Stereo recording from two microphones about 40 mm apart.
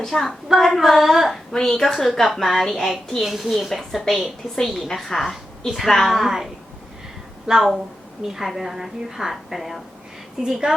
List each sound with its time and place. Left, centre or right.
0.0 s a woman's voice: centre
0.6 s a woman's voice: centre
1.5 s a woman's voice: centre
10.4 s a woman's voice: centre